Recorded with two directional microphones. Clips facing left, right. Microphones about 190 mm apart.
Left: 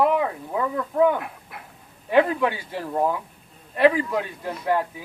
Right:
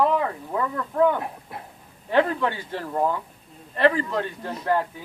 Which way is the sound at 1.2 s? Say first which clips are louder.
Right 3 dB; 30° right (ahead or behind).